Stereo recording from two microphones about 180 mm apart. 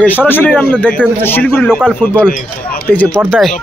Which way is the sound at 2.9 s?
10° left (ahead or behind).